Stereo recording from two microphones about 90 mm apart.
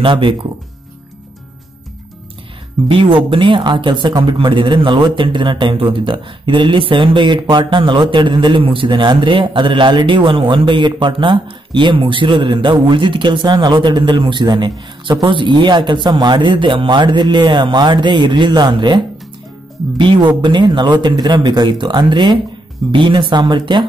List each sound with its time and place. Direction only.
0.0 s speech: 70° right (ahead or behind)
2.9 s a man's voice: 75° right (ahead or behind)